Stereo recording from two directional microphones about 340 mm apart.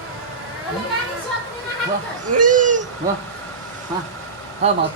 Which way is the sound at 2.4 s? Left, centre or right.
Right.